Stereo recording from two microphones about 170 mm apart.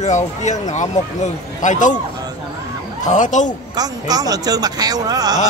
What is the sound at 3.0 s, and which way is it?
Speech, 45° left (ahead or behind).